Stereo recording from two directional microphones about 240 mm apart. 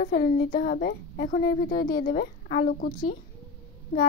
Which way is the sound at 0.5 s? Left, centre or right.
Left.